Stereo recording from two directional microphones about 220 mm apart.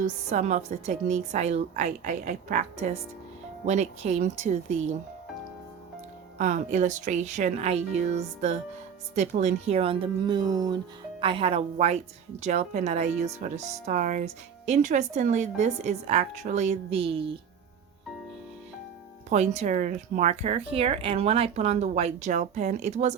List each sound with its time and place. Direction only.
0.0 s speech: 30° right (ahead or behind)
6.4 s speech: 35° right (ahead or behind)
19.3 s speech: 30° right (ahead or behind)